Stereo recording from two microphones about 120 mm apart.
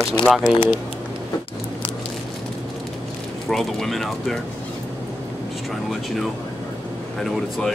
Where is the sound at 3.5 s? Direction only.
Centre (ahead or behind).